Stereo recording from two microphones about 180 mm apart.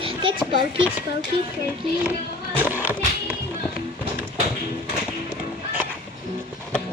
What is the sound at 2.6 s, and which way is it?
Music, 10° right (ahead or behind).